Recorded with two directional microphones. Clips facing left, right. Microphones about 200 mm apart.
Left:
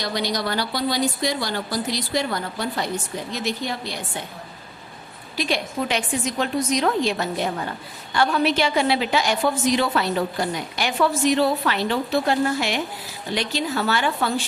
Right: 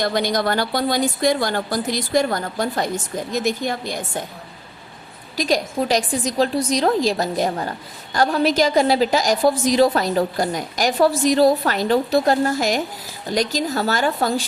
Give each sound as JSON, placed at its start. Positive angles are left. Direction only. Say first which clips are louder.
{"t": 0.0, "sound": "speech", "louder": "right 5 dB", "side_deg": -50}
{"t": 5.4, "sound": "a woman's voice", "louder": "right 4 dB", "side_deg": -40}